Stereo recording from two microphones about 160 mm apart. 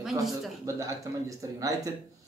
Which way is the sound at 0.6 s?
20° right (ahead or behind).